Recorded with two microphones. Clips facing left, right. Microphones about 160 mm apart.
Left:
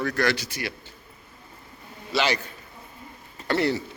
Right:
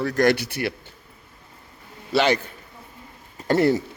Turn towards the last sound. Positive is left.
turn(degrees=-45)  # may be behind; listen again after turning